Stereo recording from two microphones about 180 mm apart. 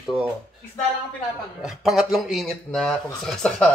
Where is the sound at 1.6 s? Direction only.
Centre (ahead or behind).